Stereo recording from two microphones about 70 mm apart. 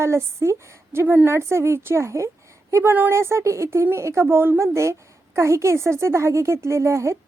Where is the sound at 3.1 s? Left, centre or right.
Right.